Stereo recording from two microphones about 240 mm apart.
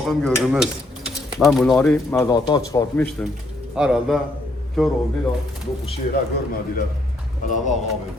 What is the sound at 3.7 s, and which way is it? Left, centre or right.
Stir, centre.